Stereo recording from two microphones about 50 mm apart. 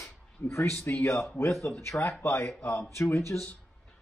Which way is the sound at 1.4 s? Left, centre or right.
Left.